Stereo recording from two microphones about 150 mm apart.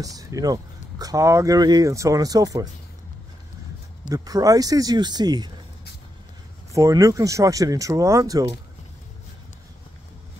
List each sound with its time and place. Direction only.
0.0 s speech: 25° right (ahead or behind)
4.1 s speech: 25° right (ahead or behind)
6.7 s speech: 20° right (ahead or behind)